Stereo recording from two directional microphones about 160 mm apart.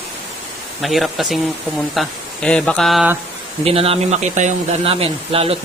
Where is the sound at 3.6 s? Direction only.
35° right (ahead or behind).